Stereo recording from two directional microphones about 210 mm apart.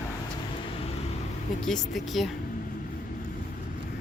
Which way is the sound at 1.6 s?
Centre (ahead or behind).